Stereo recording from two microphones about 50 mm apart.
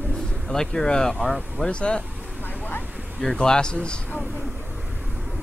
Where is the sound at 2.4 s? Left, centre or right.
Left.